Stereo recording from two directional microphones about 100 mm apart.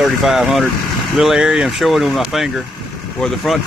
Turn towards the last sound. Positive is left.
turn(degrees=5)  # may be behind; listen again after turning